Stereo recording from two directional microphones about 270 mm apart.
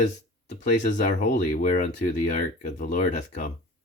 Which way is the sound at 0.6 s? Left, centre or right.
Left.